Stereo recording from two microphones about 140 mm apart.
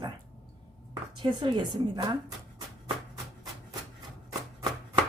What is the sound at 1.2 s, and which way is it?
A woman's voice, 35° right (ahead or behind).